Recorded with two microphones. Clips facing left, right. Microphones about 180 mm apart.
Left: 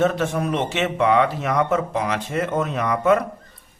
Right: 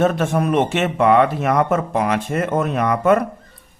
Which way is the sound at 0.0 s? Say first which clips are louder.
Right 3 dB; 55° right (ahead or behind).